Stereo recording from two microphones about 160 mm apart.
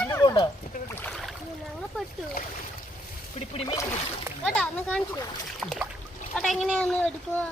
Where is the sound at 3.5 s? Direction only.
40° left (ahead or behind).